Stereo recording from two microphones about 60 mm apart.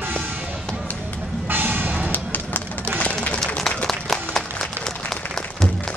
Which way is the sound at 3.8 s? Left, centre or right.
Centre.